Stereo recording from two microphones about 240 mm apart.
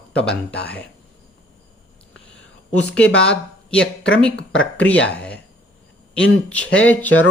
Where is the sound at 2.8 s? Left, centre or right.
Centre.